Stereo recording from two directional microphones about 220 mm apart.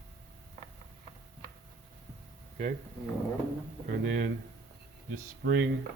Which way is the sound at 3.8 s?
50° right (ahead or behind).